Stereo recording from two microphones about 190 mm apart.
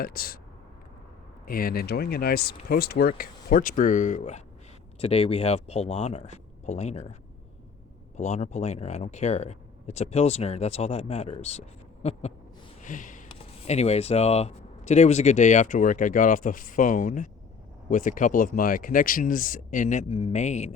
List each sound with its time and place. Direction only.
0.0 s speech: 50° left (ahead or behind)
1.5 s speech: 50° left (ahead or behind)
12.8 s sniff: 45° left (ahead or behind)
13.7 s speech: 35° left (ahead or behind)